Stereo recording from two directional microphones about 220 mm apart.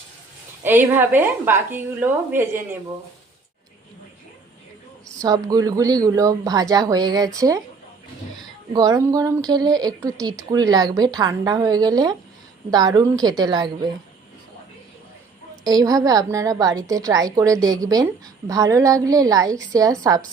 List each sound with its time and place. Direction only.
0.6 s a woman's voice: 10° right (ahead or behind)
5.2 s a woman's voice: 15° right (ahead or behind)
8.7 s a woman's voice: 15° right (ahead or behind)
15.6 s a woman's voice: 15° right (ahead or behind)